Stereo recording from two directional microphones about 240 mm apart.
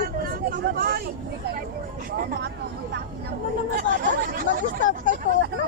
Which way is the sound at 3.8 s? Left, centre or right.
Right.